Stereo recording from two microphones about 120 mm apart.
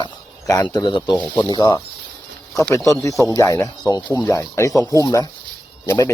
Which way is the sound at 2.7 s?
25° left (ahead or behind).